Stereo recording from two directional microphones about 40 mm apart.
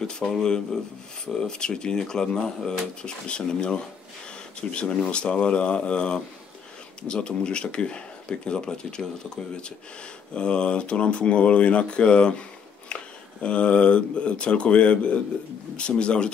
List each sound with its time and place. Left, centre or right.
0.2 s speech: centre; by 16.3 s left